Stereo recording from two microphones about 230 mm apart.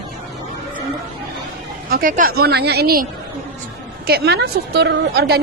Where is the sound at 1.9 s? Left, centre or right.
Right.